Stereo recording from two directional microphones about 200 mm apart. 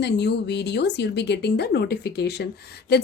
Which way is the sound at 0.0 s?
60° left (ahead or behind).